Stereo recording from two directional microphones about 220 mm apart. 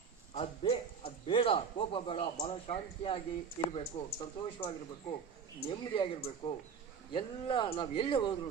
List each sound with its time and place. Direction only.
0.3 s a man's voice: 25° left (ahead or behind)